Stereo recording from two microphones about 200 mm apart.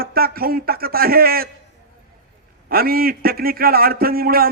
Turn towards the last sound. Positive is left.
turn(degrees=-50)  # may be behind; listen again after turning